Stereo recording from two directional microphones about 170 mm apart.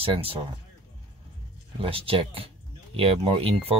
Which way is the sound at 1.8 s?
35° right (ahead or behind).